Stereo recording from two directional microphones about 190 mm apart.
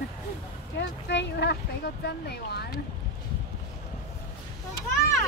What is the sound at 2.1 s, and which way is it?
Speech, 60° left (ahead or behind).